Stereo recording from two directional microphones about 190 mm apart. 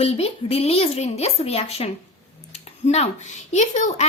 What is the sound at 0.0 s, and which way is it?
A woman's voice, 30° left (ahead or behind).